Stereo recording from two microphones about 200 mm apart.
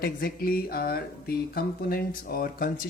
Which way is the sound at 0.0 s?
50° left (ahead or behind).